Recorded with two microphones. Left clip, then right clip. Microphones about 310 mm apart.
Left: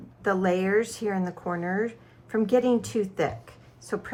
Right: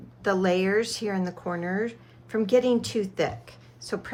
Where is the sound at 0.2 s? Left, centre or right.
Centre.